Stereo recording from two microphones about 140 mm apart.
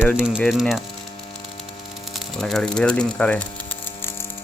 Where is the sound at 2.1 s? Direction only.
5° left (ahead or behind).